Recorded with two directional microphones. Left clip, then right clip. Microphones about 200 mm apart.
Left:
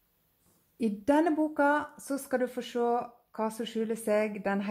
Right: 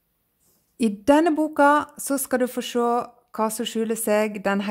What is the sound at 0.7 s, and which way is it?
Speech, 45° right (ahead or behind).